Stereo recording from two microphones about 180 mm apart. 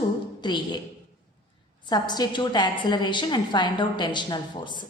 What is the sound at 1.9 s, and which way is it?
A woman's voice, 25° left (ahead or behind).